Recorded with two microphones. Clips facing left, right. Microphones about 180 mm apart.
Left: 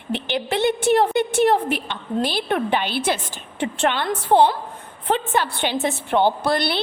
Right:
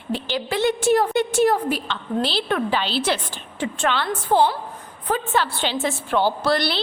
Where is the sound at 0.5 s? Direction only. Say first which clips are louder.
Even; 60° left (ahead or behind).